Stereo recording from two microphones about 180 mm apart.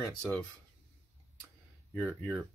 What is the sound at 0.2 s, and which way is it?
Speech, 10° left (ahead or behind).